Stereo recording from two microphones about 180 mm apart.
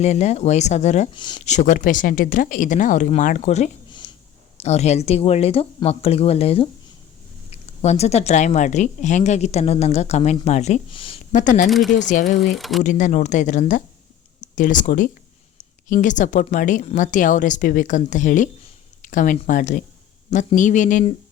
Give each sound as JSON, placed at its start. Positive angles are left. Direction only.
{"t": 0.0, "sound": "speech", "side_deg": 40}
{"t": 1.1, "sound": "speech", "side_deg": 25}
{"t": 1.5, "sound": "speech", "side_deg": 45}
{"t": 11.3, "sound": "speech", "side_deg": 45}
{"t": 11.7, "sound": "speech", "side_deg": 0}
{"t": 11.9, "sound": "speech", "side_deg": 45}
{"t": 12.4, "sound": "speech", "side_deg": 0}
{"t": 12.8, "sound": "a woman's voice", "side_deg": 45}